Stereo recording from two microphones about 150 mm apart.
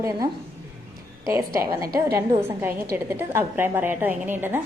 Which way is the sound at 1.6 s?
20° right (ahead or behind).